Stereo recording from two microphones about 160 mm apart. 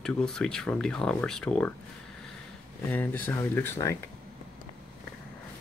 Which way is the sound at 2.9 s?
10° left (ahead or behind).